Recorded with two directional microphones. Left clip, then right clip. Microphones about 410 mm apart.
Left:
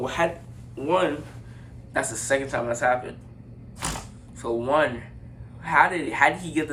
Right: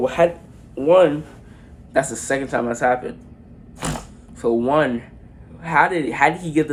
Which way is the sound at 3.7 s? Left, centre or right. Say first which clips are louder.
Right 4 dB; centre.